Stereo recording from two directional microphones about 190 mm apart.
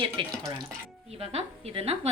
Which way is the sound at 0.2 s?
25° right (ahead or behind).